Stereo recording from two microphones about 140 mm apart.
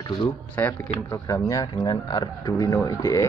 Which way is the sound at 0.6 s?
15° left (ahead or behind).